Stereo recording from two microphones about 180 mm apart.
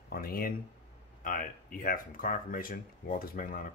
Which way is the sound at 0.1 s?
55° left (ahead or behind).